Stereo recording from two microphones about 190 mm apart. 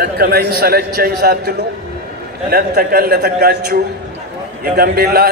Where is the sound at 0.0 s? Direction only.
55° right (ahead or behind).